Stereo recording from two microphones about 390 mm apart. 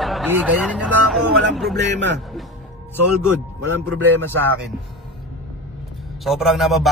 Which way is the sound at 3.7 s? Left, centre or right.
Right.